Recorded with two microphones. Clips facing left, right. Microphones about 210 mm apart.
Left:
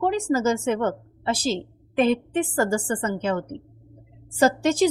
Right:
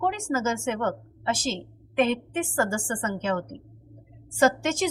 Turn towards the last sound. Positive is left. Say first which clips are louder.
# left 4 dB
turn(degrees=35)  # may be behind; listen again after turning